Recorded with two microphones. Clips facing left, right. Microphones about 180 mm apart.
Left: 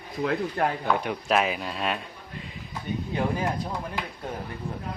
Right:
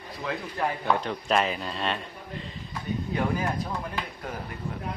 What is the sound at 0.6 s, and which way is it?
Speech, 60° left (ahead or behind).